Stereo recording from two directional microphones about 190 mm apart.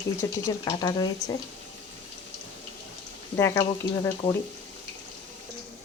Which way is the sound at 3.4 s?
15° left (ahead or behind).